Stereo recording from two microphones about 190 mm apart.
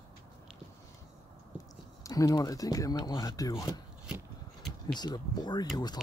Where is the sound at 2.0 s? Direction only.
20° left (ahead or behind).